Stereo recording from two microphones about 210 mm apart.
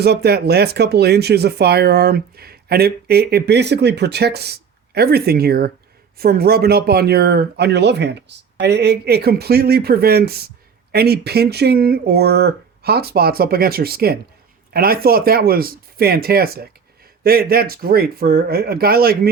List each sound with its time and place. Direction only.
0.0 s speech: 50° right (ahead or behind)